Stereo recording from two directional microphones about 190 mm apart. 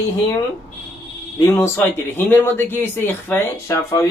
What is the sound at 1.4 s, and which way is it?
Speech, 15° left (ahead or behind).